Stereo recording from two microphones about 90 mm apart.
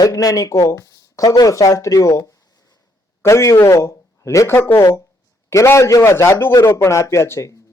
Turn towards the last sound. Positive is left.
turn(degrees=30)  # may be behind; listen again after turning